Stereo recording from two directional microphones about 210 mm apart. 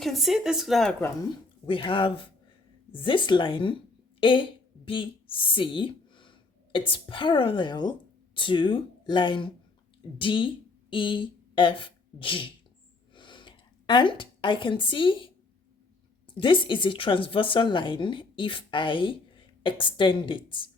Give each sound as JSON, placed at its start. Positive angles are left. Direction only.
{"t": 0.0, "sound": "speech", "side_deg": 0}
{"t": 1.6, "sound": "a woman's voice", "side_deg": 25}
{"t": 13.1, "sound": "a sound", "side_deg": 25}
{"t": 16.2, "sound": "speech", "side_deg": 25}